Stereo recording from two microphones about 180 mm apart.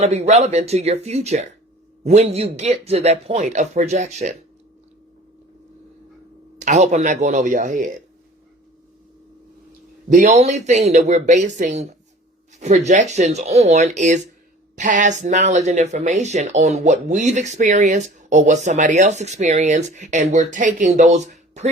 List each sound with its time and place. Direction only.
0.0 s speech: 35° right (ahead or behind)
6.6 s speech: 40° right (ahead or behind)
10.1 s speech: 45° right (ahead or behind)